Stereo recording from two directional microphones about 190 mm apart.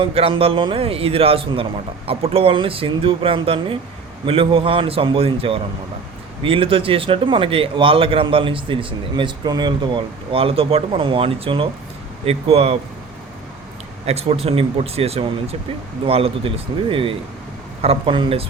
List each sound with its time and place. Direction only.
0.0 s a man's voice: 30° right (ahead or behind)
14.0 s a man's voice: 35° right (ahead or behind)